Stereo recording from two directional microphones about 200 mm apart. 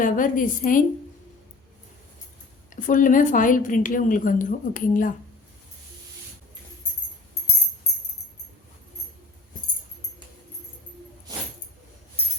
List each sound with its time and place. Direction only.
0.0 s a woman's voice: 40° left (ahead or behind)
2.7 s a woman's voice: 40° left (ahead or behind)